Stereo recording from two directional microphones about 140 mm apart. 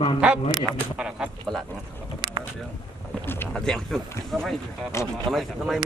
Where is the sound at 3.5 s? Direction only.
5° left (ahead or behind).